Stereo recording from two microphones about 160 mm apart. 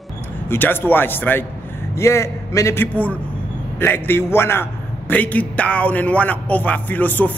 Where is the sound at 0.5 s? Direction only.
10° left (ahead or behind).